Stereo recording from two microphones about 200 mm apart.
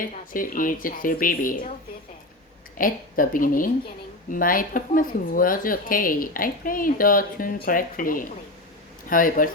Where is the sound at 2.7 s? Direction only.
45° left (ahead or behind).